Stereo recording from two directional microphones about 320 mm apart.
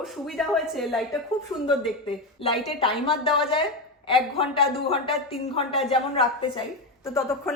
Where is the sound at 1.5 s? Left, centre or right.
Centre.